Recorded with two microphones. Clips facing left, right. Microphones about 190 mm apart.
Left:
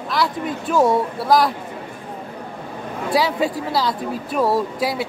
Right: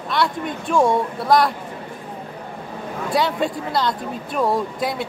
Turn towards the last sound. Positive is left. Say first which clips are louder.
# left 2 dB
turn(degrees=5)  # may be behind; listen again after turning